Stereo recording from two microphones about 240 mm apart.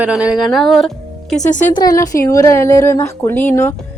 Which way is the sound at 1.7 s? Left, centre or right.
Centre.